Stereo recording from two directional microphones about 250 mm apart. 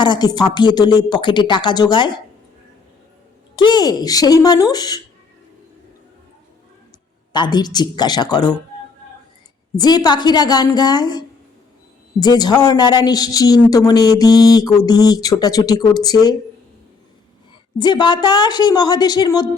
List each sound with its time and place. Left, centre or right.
0.0 s speech: centre
3.5 s speech: centre
7.3 s speech: centre
9.7 s speech: centre
17.7 s speech: centre